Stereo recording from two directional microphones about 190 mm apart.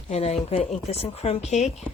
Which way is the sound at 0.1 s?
35° left (ahead or behind).